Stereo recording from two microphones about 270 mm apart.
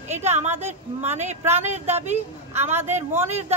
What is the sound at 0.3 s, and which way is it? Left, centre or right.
Speech, right.